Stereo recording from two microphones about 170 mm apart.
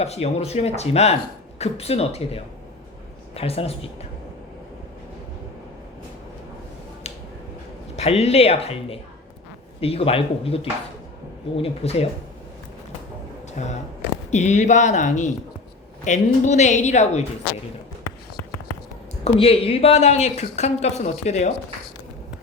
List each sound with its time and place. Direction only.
0.0 s speech: 40° left (ahead or behind)
7.1 s finger snapping: 40° left (ahead or behind)
7.9 s speech: 40° left (ahead or behind)
13.6 s a woman's voice: 45° left (ahead or behind)
19.2 s speech: 35° left (ahead or behind)